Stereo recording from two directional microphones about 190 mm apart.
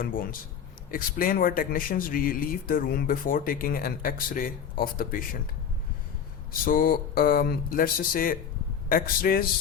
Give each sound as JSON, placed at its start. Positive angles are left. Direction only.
{"t": 0.0, "sound": "speech", "side_deg": 50}
{"t": 6.5, "sound": "speech", "side_deg": 50}